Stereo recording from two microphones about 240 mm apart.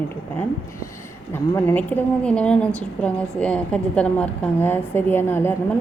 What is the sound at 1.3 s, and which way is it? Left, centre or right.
A woman's voice, centre.